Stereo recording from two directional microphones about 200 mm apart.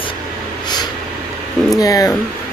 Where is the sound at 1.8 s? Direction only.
15° left (ahead or behind).